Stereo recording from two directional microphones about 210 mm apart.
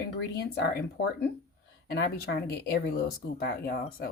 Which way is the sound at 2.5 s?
45° left (ahead or behind).